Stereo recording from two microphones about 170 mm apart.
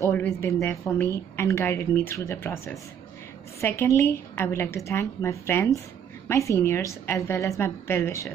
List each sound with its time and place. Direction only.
0.0 s a woman's voice: 10° left (ahead or behind)